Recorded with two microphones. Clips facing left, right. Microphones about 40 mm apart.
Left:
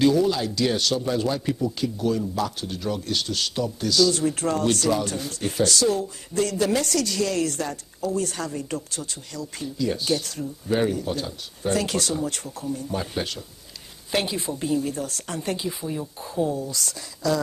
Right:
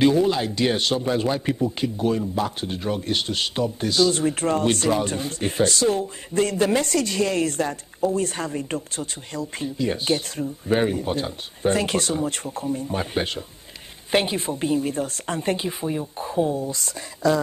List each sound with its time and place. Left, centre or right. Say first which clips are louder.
0.0 s speech: right 1 dB; right